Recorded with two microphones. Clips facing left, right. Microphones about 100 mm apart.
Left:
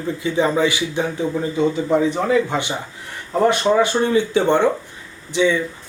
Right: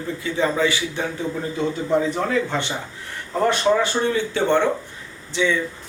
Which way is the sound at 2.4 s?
15° left (ahead or behind).